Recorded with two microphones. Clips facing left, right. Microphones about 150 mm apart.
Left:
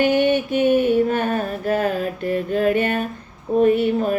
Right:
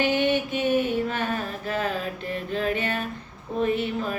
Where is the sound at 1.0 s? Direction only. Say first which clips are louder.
Left 7 dB; 45° left (ahead or behind).